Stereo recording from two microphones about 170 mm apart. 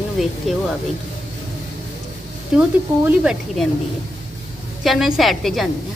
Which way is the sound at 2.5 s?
5° right (ahead or behind).